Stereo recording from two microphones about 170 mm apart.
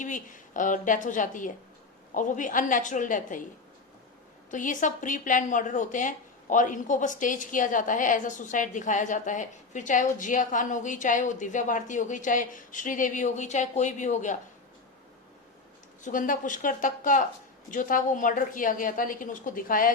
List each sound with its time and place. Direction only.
0.0 s a woman's voice: 50° left (ahead or behind)
4.5 s a woman's voice: 50° left (ahead or behind)
16.0 s a woman's voice: 50° left (ahead or behind)